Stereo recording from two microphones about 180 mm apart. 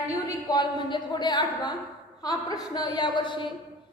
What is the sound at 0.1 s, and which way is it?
A woman's voice, 20° left (ahead or behind).